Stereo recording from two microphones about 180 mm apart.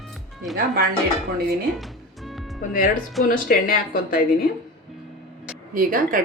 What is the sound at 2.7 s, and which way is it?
Speech, 50° left (ahead or behind).